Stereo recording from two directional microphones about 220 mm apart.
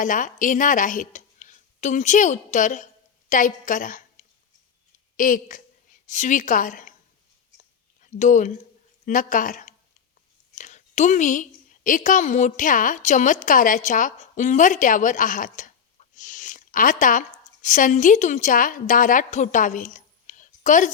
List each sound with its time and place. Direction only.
0.0 s a woman's voice: 35° left (ahead or behind)
5.1 s a woman's voice: 35° left (ahead or behind)
8.0 s a woman's voice: 35° left (ahead or behind)